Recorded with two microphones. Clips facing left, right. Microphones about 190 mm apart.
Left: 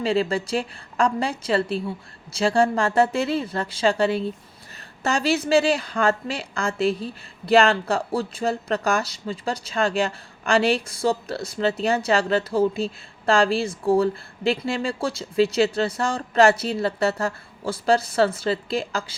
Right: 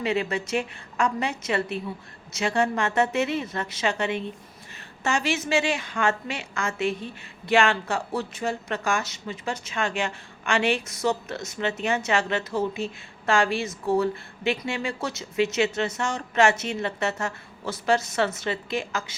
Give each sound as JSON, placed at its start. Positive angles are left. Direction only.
{"t": 0.0, "sound": "a woman's voice", "side_deg": 30}